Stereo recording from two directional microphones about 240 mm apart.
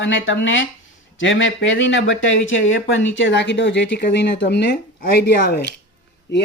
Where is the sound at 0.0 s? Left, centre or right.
Left.